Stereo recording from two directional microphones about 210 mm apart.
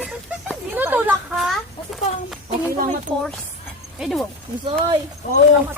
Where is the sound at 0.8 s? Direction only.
10° right (ahead or behind).